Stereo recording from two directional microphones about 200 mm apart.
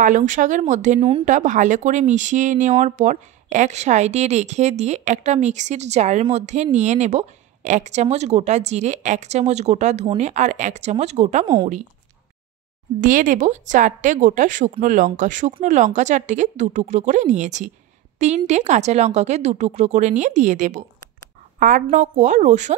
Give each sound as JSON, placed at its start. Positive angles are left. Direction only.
{"t": 0.0, "sound": "speech", "side_deg": -40}
{"t": 11.4, "sound": "a woman's voice", "side_deg": -20}
{"t": 13.0, "sound": "a woman's voice", "side_deg": -40}